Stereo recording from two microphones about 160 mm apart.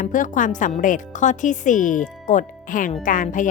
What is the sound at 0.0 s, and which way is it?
A woman's voice, 55° left (ahead or behind).